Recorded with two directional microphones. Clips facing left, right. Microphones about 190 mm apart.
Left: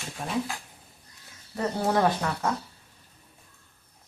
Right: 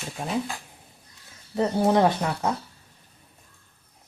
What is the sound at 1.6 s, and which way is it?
Speech, 20° right (ahead or behind).